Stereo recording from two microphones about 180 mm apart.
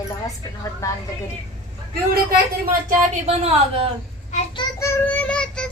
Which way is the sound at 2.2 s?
55° right (ahead or behind).